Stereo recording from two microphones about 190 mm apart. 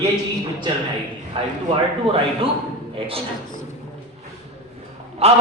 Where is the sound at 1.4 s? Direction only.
25° right (ahead or behind).